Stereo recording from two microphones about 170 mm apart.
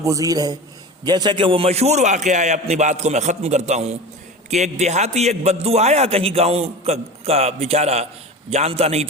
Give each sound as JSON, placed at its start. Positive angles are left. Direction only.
{"t": 0.0, "sound": "a man's voice", "side_deg": -20}